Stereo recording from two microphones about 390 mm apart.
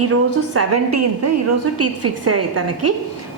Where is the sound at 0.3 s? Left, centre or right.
Right.